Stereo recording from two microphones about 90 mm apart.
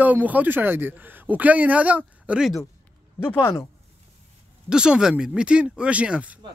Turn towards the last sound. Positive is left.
turn(degrees=-15)  # may be behind; listen again after turning